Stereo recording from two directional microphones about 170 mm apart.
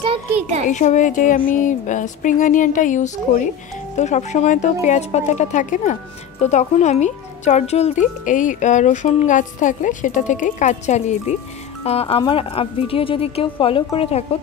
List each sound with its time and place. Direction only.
0.0 s a child's voice: 35° right (ahead or behind)
0.7 s speech: 45° left (ahead or behind)